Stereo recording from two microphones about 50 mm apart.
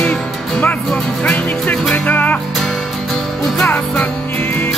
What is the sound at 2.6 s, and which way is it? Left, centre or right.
Music, centre.